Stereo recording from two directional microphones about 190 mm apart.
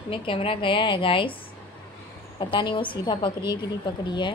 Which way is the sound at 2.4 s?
25° left (ahead or behind).